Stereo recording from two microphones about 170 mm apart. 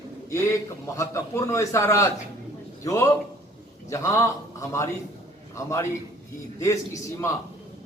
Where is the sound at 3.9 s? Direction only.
20° left (ahead or behind).